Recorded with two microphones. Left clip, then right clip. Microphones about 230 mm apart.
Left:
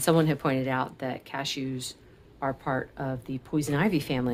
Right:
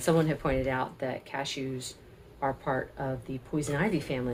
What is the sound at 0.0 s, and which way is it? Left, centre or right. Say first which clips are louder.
Speech: left 3 dB; left.